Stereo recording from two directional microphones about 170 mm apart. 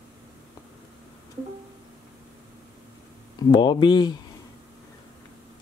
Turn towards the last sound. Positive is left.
turn(degrees=25)  # may be behind; listen again after turning